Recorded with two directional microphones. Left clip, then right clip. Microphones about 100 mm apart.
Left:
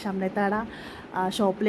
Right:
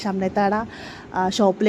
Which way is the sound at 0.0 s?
45° right (ahead or behind).